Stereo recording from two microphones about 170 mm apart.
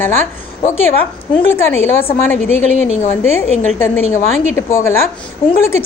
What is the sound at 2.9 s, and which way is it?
Speech, 40° left (ahead or behind).